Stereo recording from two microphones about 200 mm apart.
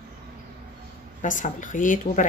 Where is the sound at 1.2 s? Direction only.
40° left (ahead or behind).